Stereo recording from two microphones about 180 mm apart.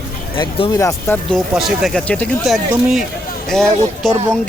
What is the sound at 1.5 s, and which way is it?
Speech, centre (ahead or behind).